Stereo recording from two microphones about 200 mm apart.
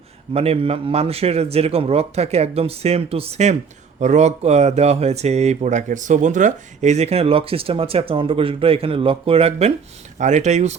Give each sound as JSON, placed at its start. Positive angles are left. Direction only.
{"t": 0.3, "sound": "speech", "side_deg": -30}